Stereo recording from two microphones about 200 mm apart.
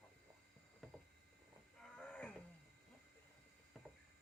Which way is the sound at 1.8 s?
5° left (ahead or behind).